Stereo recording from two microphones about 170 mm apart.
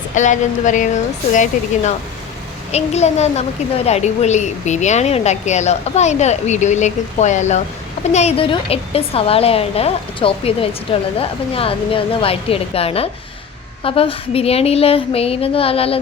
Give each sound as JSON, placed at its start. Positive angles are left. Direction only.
{"t": 0.1, "sound": "a woman's voice", "side_deg": 45}